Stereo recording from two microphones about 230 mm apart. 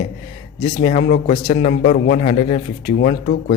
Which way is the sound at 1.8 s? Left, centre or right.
Left.